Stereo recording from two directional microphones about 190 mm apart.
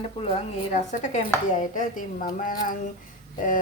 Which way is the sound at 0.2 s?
35° left (ahead or behind).